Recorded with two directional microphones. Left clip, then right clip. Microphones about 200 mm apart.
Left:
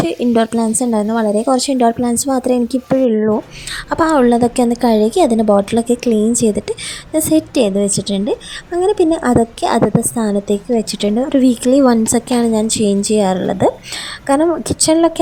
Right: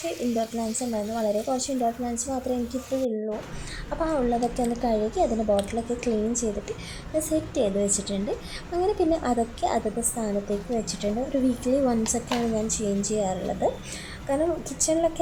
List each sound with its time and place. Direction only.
0.3 s a woman's voice: 50° left (ahead or behind)